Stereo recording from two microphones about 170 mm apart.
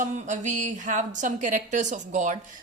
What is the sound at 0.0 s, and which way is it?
A woman's voice, 45° right (ahead or behind).